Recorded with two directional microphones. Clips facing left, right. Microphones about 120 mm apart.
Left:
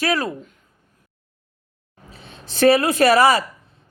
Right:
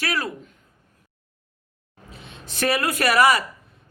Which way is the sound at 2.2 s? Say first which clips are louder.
Left 8 dB; 35° left (ahead or behind).